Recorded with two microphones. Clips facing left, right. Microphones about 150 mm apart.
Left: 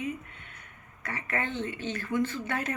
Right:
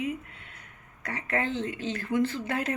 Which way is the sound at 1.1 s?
30° right (ahead or behind).